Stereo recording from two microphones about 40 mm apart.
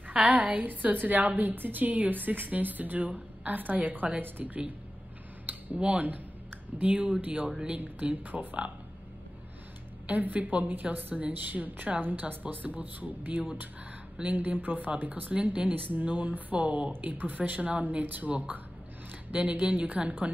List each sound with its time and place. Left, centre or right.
0.1 s a woman's voice: right
5.8 s a woman's voice: right
10.0 s a woman's voice: right
12.6 s a woman's voice: right
17.8 s a woman's voice: right
19.6 s a woman's voice: right